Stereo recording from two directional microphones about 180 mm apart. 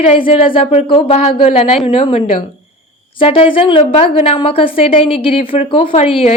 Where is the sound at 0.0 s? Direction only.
30° left (ahead or behind).